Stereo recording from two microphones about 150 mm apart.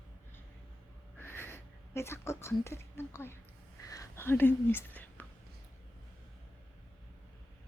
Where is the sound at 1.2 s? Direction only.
15° left (ahead or behind).